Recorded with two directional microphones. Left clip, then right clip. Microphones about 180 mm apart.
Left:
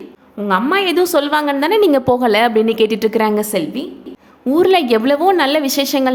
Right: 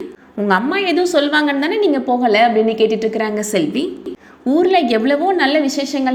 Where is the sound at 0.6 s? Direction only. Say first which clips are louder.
Left 2 dB; 15° left (ahead or behind).